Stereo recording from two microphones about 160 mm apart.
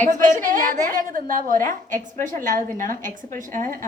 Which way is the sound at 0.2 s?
55° right (ahead or behind).